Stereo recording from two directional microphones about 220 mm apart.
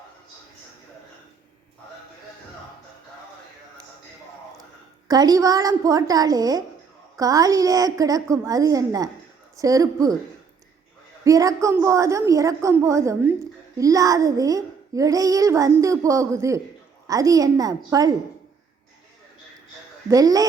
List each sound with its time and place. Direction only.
5.0 s speech: 15° right (ahead or behind)
11.2 s speech: 15° right (ahead or behind)
20.1 s speech: 15° right (ahead or behind)